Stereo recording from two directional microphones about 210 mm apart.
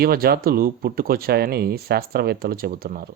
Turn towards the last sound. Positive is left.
turn(degrees=-45)  # may be behind; listen again after turning